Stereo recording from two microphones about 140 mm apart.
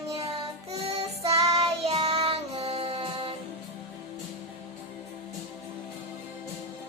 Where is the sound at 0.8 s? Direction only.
50° right (ahead or behind).